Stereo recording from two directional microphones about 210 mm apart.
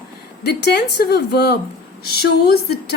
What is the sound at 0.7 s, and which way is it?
A woman's voice, 50° left (ahead or behind).